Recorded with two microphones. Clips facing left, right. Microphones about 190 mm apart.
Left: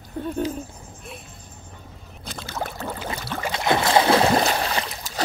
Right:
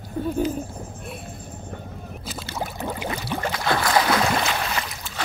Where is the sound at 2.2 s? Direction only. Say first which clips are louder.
Left 1 dB; 5° right (ahead or behind).